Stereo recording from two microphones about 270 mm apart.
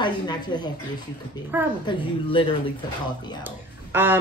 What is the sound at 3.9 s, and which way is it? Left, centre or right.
Speech, centre.